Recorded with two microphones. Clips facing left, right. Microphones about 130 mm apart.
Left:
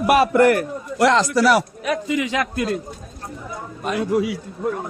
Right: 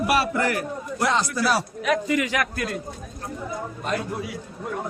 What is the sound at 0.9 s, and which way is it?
Speech, 90° left.